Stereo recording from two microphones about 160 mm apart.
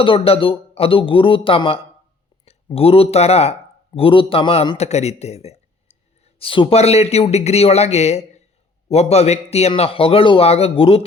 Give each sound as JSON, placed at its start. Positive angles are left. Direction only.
{"t": 0.0, "sound": "a man's voice", "side_deg": 35}
{"t": 4.8, "sound": "a man's voice", "side_deg": 45}